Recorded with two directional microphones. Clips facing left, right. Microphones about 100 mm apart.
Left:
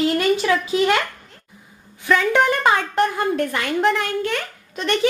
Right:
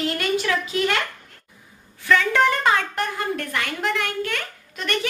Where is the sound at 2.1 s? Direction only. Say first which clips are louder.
Left 1 dB; 15° left (ahead or behind).